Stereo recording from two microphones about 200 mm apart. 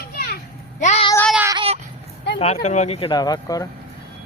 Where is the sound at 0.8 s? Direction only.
30° left (ahead or behind).